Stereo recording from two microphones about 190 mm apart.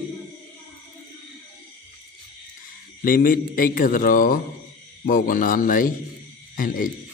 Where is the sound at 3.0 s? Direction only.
45° left (ahead or behind).